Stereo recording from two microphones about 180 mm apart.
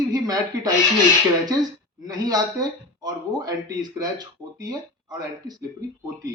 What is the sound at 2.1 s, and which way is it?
A man's voice, 20° right (ahead or behind).